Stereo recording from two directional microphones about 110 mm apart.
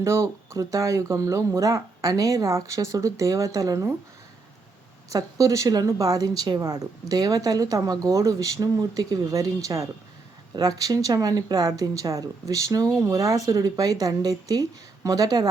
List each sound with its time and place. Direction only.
0.0 s speech: 25° right (ahead or behind)
5.0 s speech: 30° right (ahead or behind)